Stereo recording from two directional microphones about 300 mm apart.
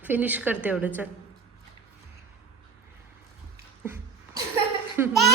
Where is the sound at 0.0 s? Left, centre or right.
Centre.